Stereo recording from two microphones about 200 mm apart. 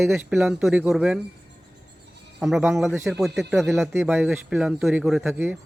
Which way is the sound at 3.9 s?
10° right (ahead or behind).